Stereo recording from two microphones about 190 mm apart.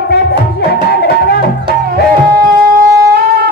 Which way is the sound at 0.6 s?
55° left (ahead or behind).